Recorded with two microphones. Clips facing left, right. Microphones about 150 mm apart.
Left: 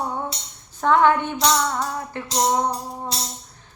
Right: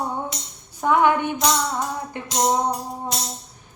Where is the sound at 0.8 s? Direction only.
15° right (ahead or behind).